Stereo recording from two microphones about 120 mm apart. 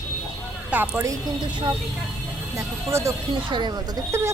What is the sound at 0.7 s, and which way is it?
Speech, 10° right (ahead or behind).